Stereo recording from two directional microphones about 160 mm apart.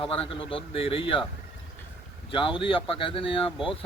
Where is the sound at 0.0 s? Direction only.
35° left (ahead or behind).